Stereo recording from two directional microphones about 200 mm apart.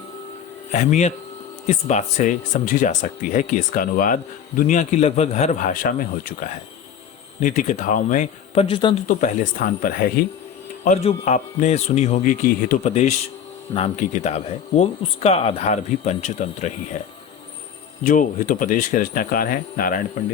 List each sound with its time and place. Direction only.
0.7 s speech: 35° left (ahead or behind)
9.0 s speech: 40° left (ahead or behind)
10.8 s speech: 35° left (ahead or behind)
18.0 s speech: 40° left (ahead or behind)